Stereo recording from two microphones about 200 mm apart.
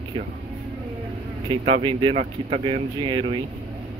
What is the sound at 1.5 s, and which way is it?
Speech, 25° right (ahead or behind).